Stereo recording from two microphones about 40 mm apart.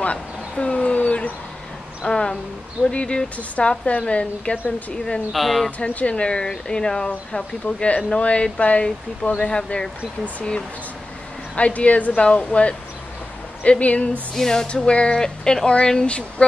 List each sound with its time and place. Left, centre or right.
0.0 s a sound: left
2.0 s a sound: left
2.9 s speech: left
5.3 s speech: centre
5.8 s speech: left
7.6 s speech: left; by 9.8 s centre
11.5 s speech: left
14.3 s speech: centre
14.9 s speech: left